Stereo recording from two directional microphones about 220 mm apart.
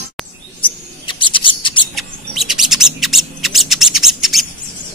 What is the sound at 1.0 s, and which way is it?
Scissors, 20° left (ahead or behind).